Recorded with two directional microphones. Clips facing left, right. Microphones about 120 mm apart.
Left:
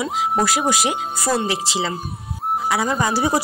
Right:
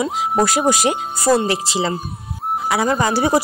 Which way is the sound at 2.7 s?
65° right (ahead or behind).